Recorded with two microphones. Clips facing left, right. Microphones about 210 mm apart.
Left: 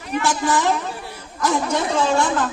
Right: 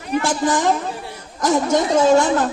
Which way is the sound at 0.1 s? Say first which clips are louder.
Right 2 dB; 45° right (ahead or behind).